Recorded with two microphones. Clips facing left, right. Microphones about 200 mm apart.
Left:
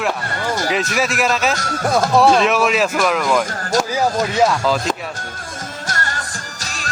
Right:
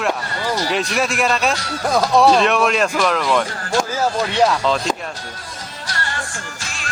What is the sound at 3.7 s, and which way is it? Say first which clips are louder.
Speech: left 1 dB; 40° left (ahead or behind).